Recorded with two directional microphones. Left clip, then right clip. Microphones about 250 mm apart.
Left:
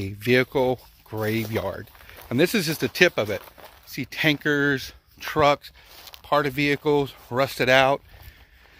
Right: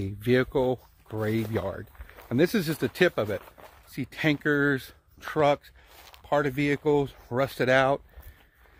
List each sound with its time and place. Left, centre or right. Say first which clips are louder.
0.0 s speech: left 4 dB; centre
3.3 s a sound: left 3 dB; left
3.9 s speech: left 5 dB; centre